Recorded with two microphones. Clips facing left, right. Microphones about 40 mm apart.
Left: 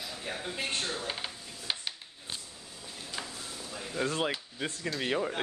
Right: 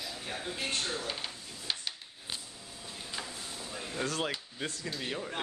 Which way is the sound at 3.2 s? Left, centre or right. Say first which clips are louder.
Left 1 dB; centre.